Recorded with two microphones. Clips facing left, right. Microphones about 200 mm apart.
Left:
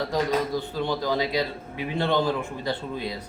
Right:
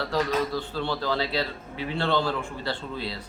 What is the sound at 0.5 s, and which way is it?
A man's voice, 15° left (ahead or behind).